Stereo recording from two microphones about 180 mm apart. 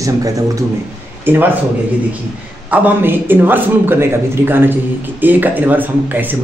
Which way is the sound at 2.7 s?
10° right (ahead or behind).